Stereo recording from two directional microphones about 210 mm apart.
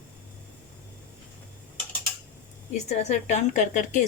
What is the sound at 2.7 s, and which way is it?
A woman's voice, 30° left (ahead or behind).